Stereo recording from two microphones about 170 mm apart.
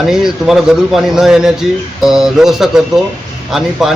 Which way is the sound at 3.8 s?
5° right (ahead or behind).